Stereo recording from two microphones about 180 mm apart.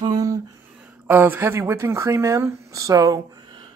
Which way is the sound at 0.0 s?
20° right (ahead or behind).